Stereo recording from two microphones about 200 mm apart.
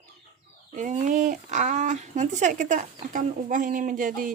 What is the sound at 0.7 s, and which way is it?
Speech, 40° right (ahead or behind).